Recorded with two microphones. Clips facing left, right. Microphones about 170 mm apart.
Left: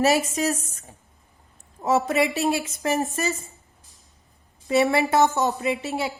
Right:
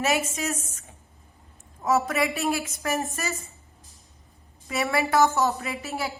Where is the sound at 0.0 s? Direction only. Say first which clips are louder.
Left 5 dB; 35° left (ahead or behind).